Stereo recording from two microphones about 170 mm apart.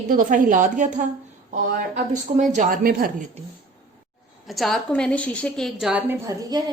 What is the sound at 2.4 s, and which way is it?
Speech, 50° right (ahead or behind).